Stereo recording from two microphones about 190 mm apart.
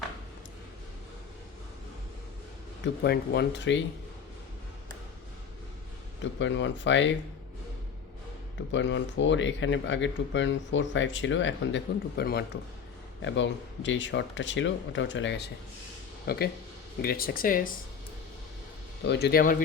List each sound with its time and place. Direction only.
2.8 s speech: 60° left (ahead or behind)
6.4 s speech: 75° left (ahead or behind)
8.7 s speech: 70° left (ahead or behind); by 12.5 s 55° left (ahead or behind)
13.2 s speech: 75° left (ahead or behind)
16.2 s speech: 55° left (ahead or behind)
19.0 s speech: 65° left (ahead or behind)